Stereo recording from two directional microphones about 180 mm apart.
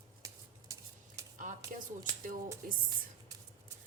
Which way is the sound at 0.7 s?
20° right (ahead or behind).